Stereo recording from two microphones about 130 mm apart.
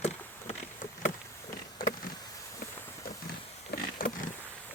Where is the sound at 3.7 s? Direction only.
90° left.